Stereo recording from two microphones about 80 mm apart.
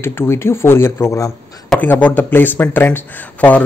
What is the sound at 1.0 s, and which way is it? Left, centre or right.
Speech, left.